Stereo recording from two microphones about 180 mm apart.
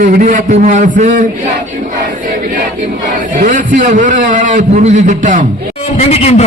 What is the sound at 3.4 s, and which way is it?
A man's voice, 45° right (ahead or behind).